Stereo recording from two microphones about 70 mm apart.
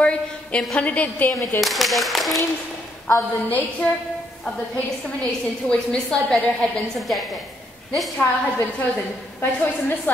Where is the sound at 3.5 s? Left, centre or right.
Centre.